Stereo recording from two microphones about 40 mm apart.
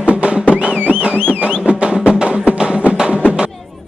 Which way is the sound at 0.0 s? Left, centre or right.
Right.